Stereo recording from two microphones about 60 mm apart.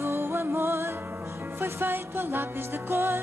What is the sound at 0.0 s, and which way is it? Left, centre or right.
Music, right.